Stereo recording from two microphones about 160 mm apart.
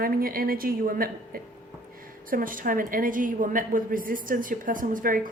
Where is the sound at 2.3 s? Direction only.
60° right (ahead or behind).